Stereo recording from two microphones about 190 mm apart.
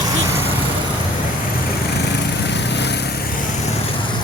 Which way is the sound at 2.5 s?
65° left (ahead or behind).